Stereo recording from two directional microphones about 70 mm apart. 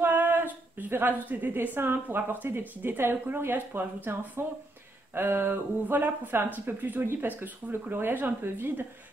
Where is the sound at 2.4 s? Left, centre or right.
Right.